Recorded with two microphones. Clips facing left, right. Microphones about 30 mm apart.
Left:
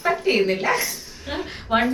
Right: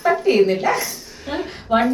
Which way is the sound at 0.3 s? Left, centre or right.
Centre.